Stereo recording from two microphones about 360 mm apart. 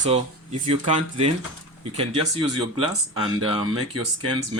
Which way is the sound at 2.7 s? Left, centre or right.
Centre.